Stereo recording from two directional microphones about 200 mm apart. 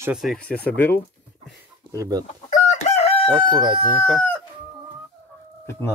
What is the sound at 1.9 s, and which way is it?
Speech, 15° right (ahead or behind).